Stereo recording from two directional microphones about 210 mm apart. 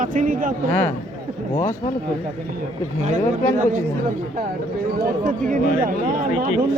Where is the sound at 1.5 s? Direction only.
40° left (ahead or behind).